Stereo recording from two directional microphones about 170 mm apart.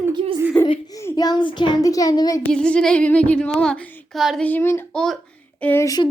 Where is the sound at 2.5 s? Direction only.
5° left (ahead or behind).